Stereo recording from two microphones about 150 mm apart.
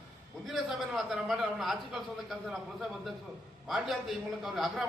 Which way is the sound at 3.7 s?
Centre (ahead or behind).